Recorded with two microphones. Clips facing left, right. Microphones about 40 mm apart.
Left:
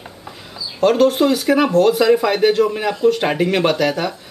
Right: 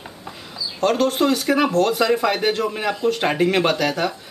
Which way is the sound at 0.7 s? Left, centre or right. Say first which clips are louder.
Left 5 dB; centre.